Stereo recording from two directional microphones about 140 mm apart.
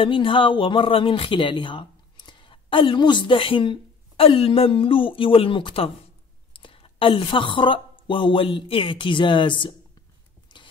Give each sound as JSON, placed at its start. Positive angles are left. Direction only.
{"t": 0.0, "sound": "a woman's voice", "side_deg": 35}